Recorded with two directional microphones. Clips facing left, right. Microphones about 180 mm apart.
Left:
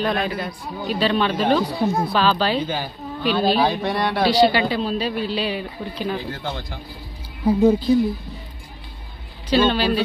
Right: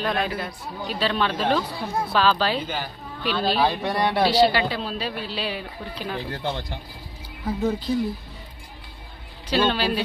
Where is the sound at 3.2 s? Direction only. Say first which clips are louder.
Left 4 dB; 10° left (ahead or behind).